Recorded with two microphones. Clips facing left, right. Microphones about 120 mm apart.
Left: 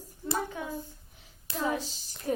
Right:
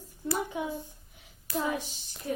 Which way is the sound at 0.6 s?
15° right (ahead or behind).